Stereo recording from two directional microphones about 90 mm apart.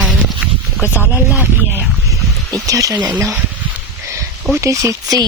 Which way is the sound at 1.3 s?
20° right (ahead or behind).